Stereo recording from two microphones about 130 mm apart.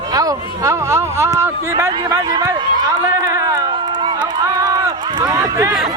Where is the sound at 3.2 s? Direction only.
25° right (ahead or behind).